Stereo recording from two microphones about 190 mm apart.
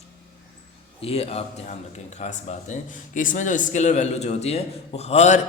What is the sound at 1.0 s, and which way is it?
Speech, 30° left (ahead or behind).